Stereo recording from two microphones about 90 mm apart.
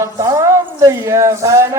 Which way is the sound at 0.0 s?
35° right (ahead or behind).